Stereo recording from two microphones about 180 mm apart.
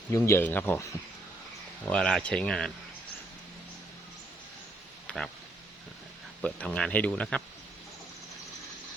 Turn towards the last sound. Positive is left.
turn(degrees=5)  # may be behind; listen again after turning